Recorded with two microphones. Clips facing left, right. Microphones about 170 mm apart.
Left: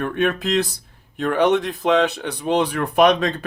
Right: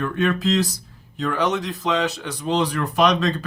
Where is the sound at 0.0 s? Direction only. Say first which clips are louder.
Even; 60° left (ahead or behind).